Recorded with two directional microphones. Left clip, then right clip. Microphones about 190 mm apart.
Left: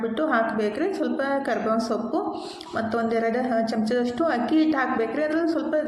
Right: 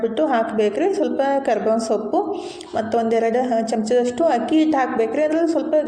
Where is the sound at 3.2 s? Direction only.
15° right (ahead or behind).